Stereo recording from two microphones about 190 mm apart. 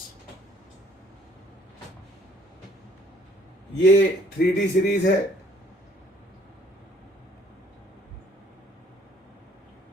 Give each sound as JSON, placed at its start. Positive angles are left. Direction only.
{"t": 3.8, "sound": "speech", "side_deg": 65}